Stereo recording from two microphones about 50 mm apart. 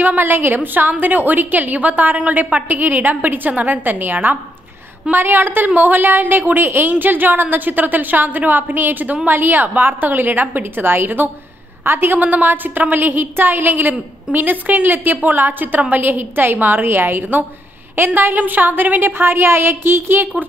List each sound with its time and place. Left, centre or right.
0.0 s a woman's voice: right